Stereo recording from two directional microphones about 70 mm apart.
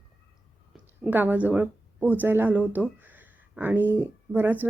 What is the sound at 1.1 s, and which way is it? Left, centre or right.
Speech, right.